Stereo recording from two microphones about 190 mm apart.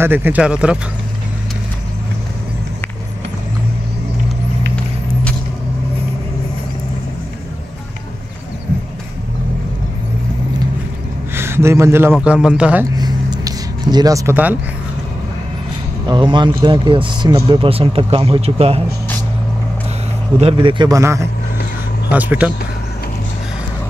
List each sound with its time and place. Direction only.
0.0 s a man's voice: 10° right (ahead or behind)
11.3 s a man's voice: 10° right (ahead or behind)
12.9 s a sound: 20° right (ahead or behind)
16.1 s speech: 25° right (ahead or behind)
20.3 s a man's voice: 30° right (ahead or behind); by 22.5 s 10° right (ahead or behind)